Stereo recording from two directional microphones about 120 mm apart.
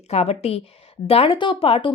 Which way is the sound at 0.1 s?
60° left (ahead or behind).